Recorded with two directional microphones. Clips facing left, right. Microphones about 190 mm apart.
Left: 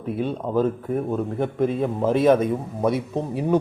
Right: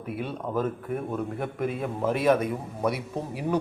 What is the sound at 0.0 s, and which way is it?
A man's voice, 25° left (ahead or behind).